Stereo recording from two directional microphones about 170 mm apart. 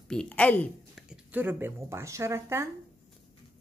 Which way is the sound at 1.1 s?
10° right (ahead or behind).